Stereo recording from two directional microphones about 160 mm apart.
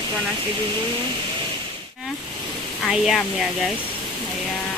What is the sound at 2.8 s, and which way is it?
Speech, centre (ahead or behind).